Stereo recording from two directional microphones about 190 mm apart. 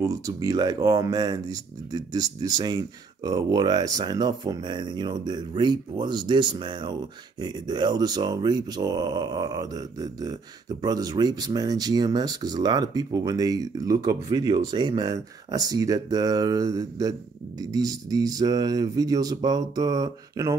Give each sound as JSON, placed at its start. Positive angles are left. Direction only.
{"t": 0.0, "sound": "speech", "side_deg": -20}